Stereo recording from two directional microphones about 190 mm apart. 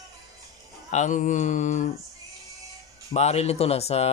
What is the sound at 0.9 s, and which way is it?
Speech, 40° left (ahead or behind).